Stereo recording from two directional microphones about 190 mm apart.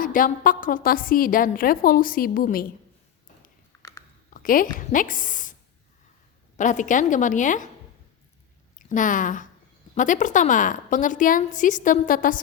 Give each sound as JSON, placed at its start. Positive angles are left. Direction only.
{"t": 0.0, "sound": "a woman's voice", "side_deg": 45}
{"t": 4.4, "sound": "a woman's voice", "side_deg": 45}
{"t": 6.6, "sound": "a woman's voice", "side_deg": 40}
{"t": 8.9, "sound": "a woman's voice", "side_deg": 45}